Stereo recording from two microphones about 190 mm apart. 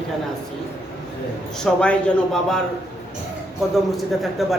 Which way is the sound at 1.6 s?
5° left (ahead or behind).